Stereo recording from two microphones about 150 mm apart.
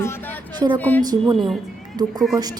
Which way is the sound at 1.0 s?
25° right (ahead or behind).